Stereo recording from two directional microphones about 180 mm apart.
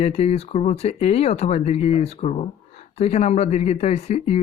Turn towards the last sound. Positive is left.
turn(degrees=40)  # may be behind; listen again after turning